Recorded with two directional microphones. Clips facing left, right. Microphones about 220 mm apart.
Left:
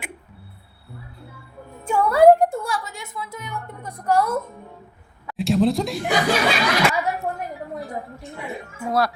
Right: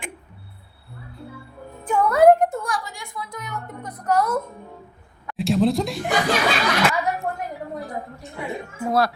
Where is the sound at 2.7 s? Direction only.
20° left (ahead or behind).